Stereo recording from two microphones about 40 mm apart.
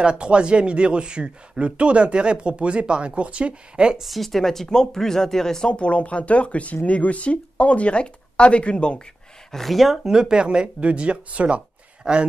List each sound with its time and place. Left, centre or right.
0.0 s speech: right
4.0 s speech: centre
5.7 s speech: left
9.5 s speech: centre
10.0 s speech: centre